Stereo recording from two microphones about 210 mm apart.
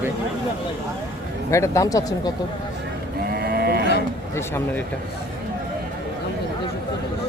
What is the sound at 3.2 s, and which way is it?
Livestock, 45° right (ahead or behind).